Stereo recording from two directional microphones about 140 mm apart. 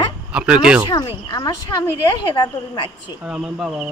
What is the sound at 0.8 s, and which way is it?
A woman's voice, 30° left (ahead or behind).